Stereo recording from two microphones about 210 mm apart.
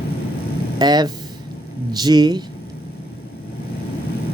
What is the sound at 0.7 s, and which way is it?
Speech, 20° right (ahead or behind).